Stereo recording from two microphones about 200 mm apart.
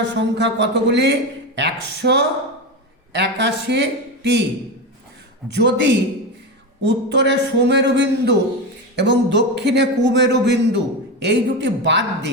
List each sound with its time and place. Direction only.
0.1 s speech: 60° right (ahead or behind)
5.5 s speech: 60° right (ahead or behind)